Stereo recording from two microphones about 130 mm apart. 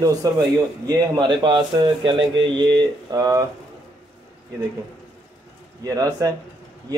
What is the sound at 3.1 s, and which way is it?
Speech, 25° right (ahead or behind).